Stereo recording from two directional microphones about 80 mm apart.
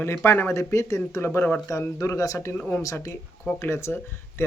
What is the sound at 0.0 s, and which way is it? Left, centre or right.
Speech, left.